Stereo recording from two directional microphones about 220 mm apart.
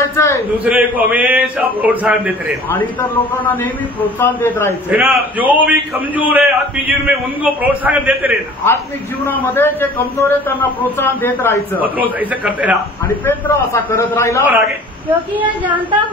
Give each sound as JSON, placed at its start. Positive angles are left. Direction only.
{"t": 0.0, "sound": "a sound", "side_deg": 10}
{"t": 0.7, "sound": "a man's voice", "side_deg": -5}
{"t": 4.2, "sound": "a man's voice", "side_deg": 10}
{"t": 4.9, "sound": "a man's voice", "side_deg": -5}
{"t": 8.6, "sound": "a man's voice", "side_deg": 10}
{"t": 12.2, "sound": "a man's voice", "side_deg": -5}
{"t": 13.2, "sound": "a man's voice", "side_deg": 10}
{"t": 14.4, "sound": "a man's voice", "side_deg": -10}